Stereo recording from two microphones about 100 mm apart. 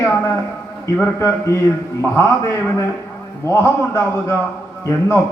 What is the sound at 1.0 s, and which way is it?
A man's voice, 25° left (ahead or behind).